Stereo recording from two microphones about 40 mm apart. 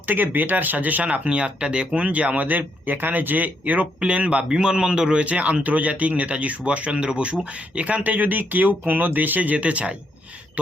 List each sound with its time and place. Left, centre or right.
0.1 s speech: right
1.0 s speech: right
4.0 s a man's voice: right
5.2 s speech: right